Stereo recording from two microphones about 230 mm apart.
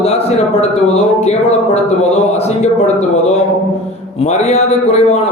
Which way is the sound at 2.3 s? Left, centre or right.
Left.